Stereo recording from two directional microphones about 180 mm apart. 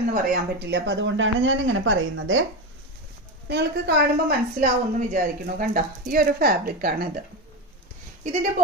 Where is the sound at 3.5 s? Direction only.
65° right (ahead or behind).